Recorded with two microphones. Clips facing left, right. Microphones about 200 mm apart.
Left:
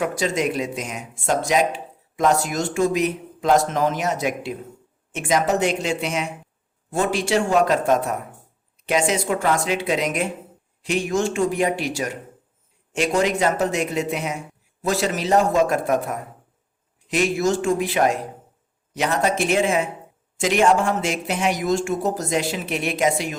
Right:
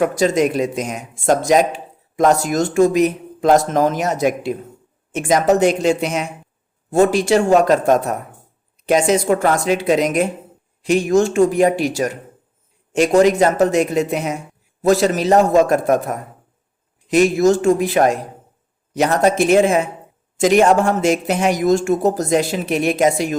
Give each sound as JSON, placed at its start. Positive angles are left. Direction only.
{"t": 0.0, "sound": "speech", "side_deg": -45}